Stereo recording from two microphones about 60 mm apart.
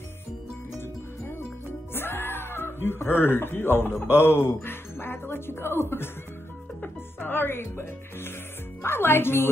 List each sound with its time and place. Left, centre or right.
2.0 s speech: left